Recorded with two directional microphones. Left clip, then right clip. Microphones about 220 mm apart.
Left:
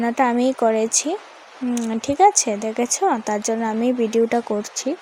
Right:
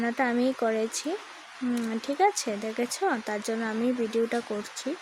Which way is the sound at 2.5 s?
20° left (ahead or behind).